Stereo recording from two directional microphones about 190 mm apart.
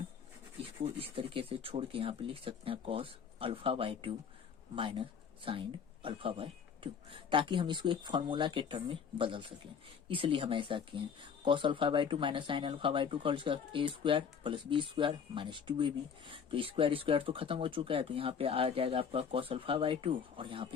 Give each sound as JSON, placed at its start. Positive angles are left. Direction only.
{"t": 0.6, "sound": "speech", "side_deg": -30}